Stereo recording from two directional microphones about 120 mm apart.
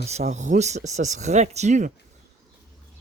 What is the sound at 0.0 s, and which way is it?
Speech, 65° right (ahead or behind).